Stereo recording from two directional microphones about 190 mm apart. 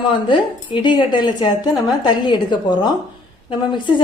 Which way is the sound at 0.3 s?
25° left (ahead or behind).